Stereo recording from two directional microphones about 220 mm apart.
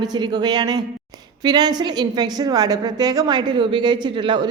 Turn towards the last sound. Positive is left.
turn(degrees=-20)  # may be behind; listen again after turning